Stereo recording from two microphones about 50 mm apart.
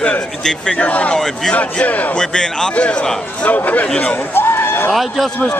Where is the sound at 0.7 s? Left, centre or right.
Left.